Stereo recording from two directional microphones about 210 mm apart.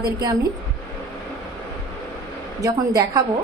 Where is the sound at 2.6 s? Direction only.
15° right (ahead or behind).